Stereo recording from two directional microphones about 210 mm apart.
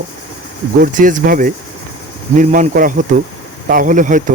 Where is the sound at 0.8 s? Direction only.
40° right (ahead or behind).